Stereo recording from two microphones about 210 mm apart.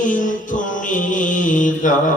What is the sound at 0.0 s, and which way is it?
Mantra, 40° left (ahead or behind).